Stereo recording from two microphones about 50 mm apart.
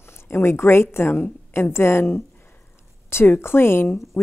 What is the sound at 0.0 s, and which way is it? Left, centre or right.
A woman's voice, left.